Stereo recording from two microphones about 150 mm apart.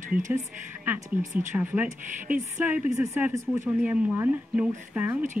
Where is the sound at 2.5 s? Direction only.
10° right (ahead or behind).